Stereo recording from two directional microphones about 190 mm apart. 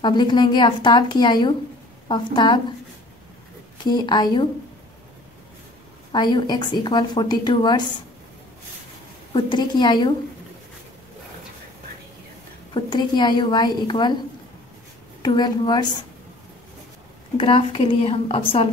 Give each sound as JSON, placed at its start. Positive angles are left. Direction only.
{"t": 0.0, "sound": "a woman's voice", "side_deg": 25}
{"t": 3.7, "sound": "a woman's voice", "side_deg": 25}
{"t": 6.1, "sound": "a woman's voice", "side_deg": 25}
{"t": 9.3, "sound": "a woman's voice", "side_deg": 25}
{"t": 12.7, "sound": "a woman's voice", "side_deg": 25}
{"t": 15.2, "sound": "a woman's voice", "side_deg": 20}
{"t": 17.4, "sound": "a woman's voice", "side_deg": 30}